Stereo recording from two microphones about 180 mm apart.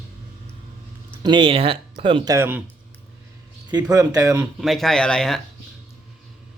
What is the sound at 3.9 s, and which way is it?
Speech, 20° right (ahead or behind).